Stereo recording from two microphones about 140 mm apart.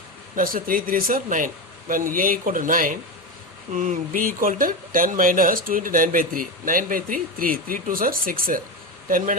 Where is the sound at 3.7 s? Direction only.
65° right (ahead or behind); by 9.4 s 80° right.